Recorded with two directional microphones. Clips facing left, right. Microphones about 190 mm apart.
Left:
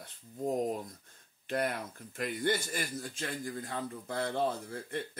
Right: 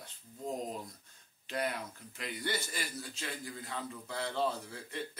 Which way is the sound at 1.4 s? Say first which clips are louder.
Left 3 dB; 50° left (ahead or behind).